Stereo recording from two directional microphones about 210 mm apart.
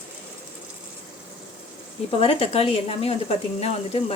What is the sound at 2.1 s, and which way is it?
A woman's voice, 25° left (ahead or behind).